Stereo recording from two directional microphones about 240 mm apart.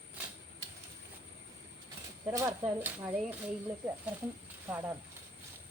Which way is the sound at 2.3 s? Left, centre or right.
Centre.